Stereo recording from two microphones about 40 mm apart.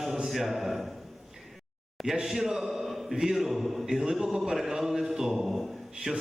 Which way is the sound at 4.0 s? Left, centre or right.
Centre.